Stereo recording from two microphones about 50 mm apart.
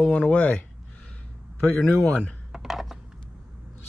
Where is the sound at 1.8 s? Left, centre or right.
Left.